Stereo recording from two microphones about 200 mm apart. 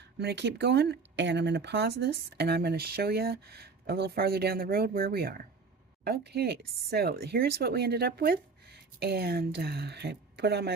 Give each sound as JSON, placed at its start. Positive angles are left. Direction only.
{"t": 0.2, "sound": "speech", "side_deg": -55}